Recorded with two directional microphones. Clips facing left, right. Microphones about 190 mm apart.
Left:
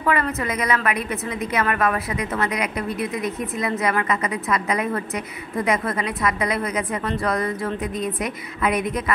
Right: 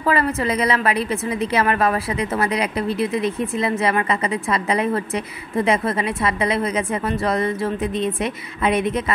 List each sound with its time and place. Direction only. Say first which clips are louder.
0.0 s a woman's voice: right 3 dB; 30° right (ahead or behind)